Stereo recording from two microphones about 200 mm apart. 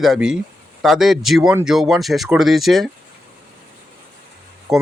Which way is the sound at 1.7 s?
Centre (ahead or behind).